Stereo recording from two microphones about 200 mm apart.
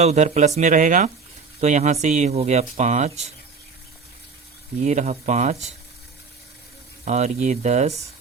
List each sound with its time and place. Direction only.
0.0 s speech: 35° right (ahead or behind)
4.8 s speech: 35° right (ahead or behind)
7.0 s speech: 35° right (ahead or behind)